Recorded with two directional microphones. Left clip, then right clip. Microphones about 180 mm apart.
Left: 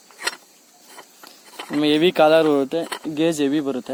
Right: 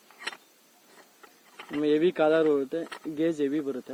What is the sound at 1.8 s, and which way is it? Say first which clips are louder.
Speech: left 8 dB; 90° left.